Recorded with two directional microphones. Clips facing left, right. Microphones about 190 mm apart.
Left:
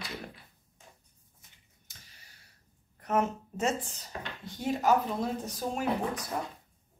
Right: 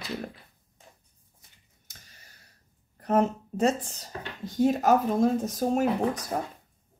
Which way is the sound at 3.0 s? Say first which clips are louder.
Right 5 dB; 35° right (ahead or behind).